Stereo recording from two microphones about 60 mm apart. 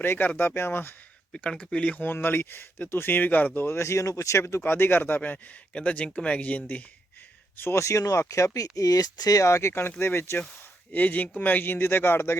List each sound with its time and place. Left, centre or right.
0.0 s speech: left
1.3 s speech: centre
2.0 s speech: left
4.6 s speech: left
5.7 s speech: left
7.6 s speech: left
8.5 s speech: left
10.9 s speech: left